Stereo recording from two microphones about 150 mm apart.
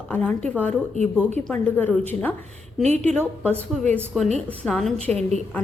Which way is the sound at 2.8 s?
50° right (ahead or behind).